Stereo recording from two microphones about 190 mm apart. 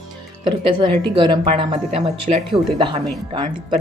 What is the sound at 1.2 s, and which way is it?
Speech, 25° right (ahead or behind).